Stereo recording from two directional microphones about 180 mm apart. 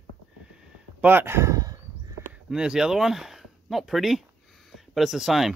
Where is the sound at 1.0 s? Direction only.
10° right (ahead or behind).